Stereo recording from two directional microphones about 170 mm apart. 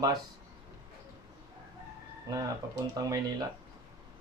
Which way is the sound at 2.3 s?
20° right (ahead or behind).